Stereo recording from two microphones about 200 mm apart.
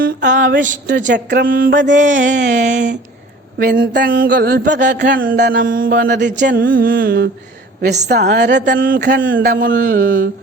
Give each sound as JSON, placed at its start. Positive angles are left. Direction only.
{"t": 0.0, "sound": "a sound", "side_deg": -45}
{"t": 1.1, "sound": "mantra", "side_deg": -55}
{"t": 2.0, "sound": "a sound", "side_deg": -40}
{"t": 3.8, "sound": "mantra", "side_deg": -55}
{"t": 4.8, "sound": "speech", "side_deg": -60}
{"t": 5.5, "sound": "mantra", "side_deg": -45}
{"t": 8.0, "sound": "speech", "side_deg": -55}
{"t": 9.4, "sound": "mantra", "side_deg": -45}